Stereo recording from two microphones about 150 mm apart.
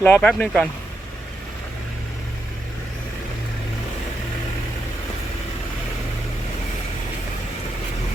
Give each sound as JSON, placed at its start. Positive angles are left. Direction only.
{"t": 0.0, "sound": "speech", "side_deg": 10}